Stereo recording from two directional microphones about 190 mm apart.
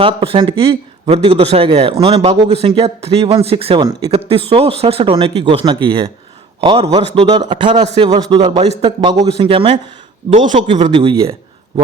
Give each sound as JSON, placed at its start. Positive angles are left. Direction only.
{"t": 0.0, "sound": "a man's voice", "side_deg": -30}
{"t": 10.2, "sound": "speech", "side_deg": -40}